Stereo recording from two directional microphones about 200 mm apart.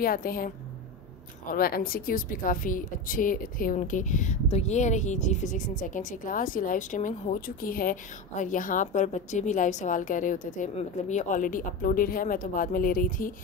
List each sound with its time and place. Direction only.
0.0 s a woman's voice: 45° left (ahead or behind)
1.5 s a woman's voice: 45° left (ahead or behind)